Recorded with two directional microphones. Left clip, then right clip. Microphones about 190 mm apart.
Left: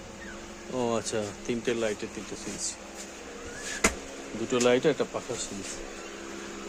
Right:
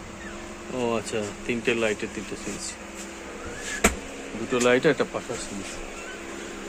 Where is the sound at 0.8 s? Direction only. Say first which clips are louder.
Right 2 dB; 30° left (ahead or behind); by 2.4 s 15° left (ahead or behind).